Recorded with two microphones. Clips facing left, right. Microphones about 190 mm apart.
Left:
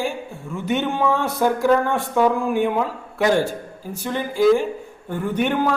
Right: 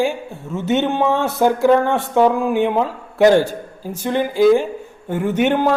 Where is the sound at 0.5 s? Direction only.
20° right (ahead or behind).